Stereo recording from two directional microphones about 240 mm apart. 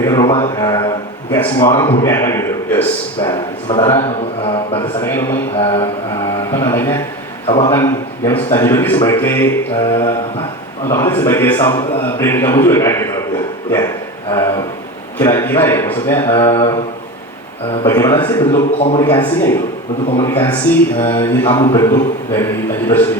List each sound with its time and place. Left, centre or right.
0.0 s a man's voice: centre
3.2 s a man's voice: centre
7.4 s a man's voice: left
7.7 s a man's voice: centre
13.7 s a sound: centre
15.2 s a man's voice: centre
16.5 s mantra: centre
17.8 s a man's voice: centre